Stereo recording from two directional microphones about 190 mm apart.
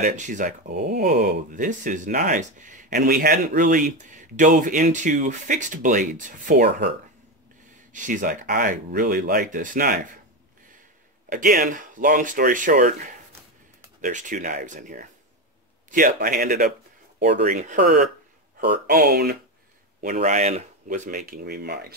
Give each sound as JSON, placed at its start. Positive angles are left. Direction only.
{"t": 0.0, "sound": "speech", "side_deg": -40}
{"t": 7.9, "sound": "speech", "side_deg": -40}
{"t": 11.2, "sound": "speech", "side_deg": -45}
{"t": 20.0, "sound": "speech", "side_deg": -40}